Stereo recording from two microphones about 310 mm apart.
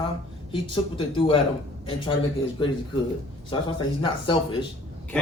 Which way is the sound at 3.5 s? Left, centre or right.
Centre.